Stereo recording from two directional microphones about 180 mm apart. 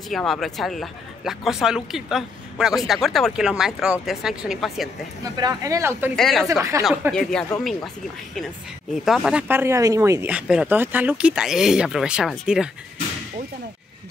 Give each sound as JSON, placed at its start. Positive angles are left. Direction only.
{"t": 0.1, "sound": "speech", "side_deg": 0}
{"t": 5.2, "sound": "speech", "side_deg": -20}
{"t": 6.1, "sound": "speech", "side_deg": 0}
{"t": 6.4, "sound": "speech", "side_deg": -15}
{"t": 7.1, "sound": "speech", "side_deg": 5}
{"t": 9.0, "sound": "speech", "side_deg": 0}